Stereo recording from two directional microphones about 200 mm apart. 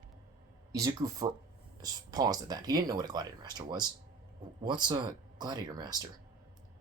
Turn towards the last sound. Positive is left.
turn(degrees=-20)  # may be behind; listen again after turning